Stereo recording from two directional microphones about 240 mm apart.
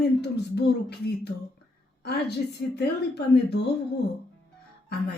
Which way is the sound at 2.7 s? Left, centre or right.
Left.